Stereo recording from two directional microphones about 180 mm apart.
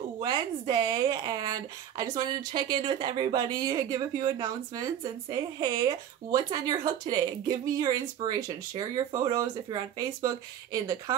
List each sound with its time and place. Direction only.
0.2 s speech: 25° right (ahead or behind)